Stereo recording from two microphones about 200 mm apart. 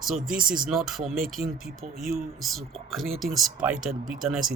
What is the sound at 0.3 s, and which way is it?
Speech, 45° right (ahead or behind).